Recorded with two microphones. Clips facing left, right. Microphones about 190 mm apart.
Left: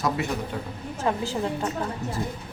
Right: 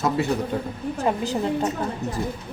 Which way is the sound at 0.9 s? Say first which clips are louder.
Right 2 dB; 15° right (ahead or behind).